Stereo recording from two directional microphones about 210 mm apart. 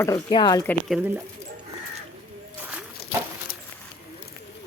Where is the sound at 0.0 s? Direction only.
20° left (ahead or behind).